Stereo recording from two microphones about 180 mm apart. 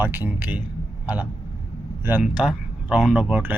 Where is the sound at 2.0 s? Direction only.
5° right (ahead or behind).